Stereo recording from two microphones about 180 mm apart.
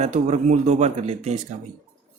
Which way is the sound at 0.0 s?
40° right (ahead or behind).